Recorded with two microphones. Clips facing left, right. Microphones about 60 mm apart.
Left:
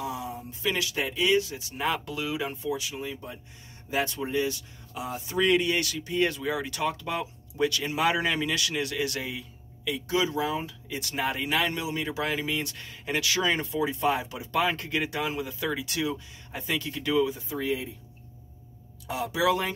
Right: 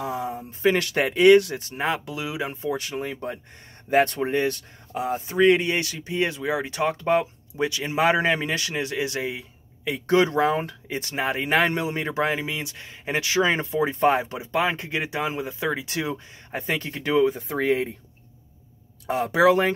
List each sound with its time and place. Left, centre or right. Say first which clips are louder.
0.0 s speech: right 5 dB; right
0.7 s speech: right 7 dB; right
2.0 s speech: right 2 dB; centre
2.5 s speech: right 3 dB; right
2.8 s speech: right 5 dB; right
7.5 s speech: right 2 dB; right
10.0 s speech: right 8 dB; right
11.0 s speech: right 3 dB; right
12.4 s speech: even; centre; by 14.5 s right
14.5 s speech: right 2 dB; right
17.4 s speech: right 7 dB; right
19.0 s speech: right 7 dB; right